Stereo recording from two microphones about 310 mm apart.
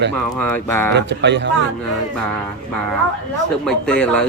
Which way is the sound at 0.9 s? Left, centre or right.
Right.